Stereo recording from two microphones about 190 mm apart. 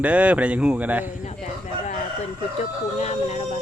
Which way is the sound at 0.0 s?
10° right (ahead or behind).